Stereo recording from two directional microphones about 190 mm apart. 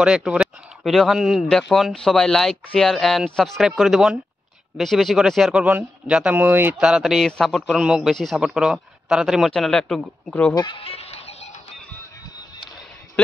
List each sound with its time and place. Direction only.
0.0 s a man's voice: 5° right (ahead or behind)
10.5 s speech: 25° left (ahead or behind)